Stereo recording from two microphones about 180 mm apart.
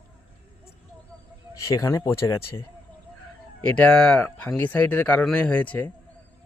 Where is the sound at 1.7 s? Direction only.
20° left (ahead or behind).